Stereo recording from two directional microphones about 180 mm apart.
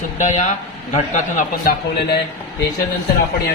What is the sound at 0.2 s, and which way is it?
A man's voice, 40° left (ahead or behind).